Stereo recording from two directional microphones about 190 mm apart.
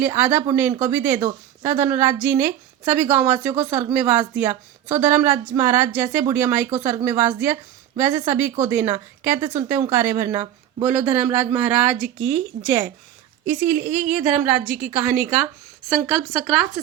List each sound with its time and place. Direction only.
0.0 s speech: 10° right (ahead or behind)
13.4 s speech: 45° right (ahead or behind)
14.1 s a woman's voice: 5° right (ahead or behind)